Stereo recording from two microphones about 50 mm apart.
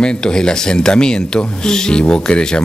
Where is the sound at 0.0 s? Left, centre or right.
Centre.